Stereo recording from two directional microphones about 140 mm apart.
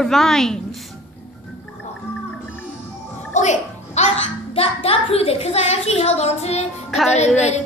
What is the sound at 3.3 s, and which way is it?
A child's voice, 55° left (ahead or behind).